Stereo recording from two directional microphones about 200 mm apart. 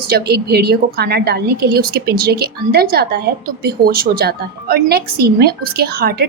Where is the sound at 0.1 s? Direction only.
50° right (ahead or behind).